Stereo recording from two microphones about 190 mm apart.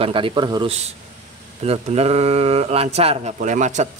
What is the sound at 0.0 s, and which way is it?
A man's voice, 25° right (ahead or behind).